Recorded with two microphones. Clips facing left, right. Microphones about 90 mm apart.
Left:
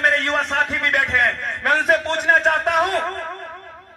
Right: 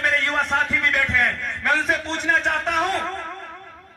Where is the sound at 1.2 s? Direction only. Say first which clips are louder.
Left 2 dB; 20° left (ahead or behind).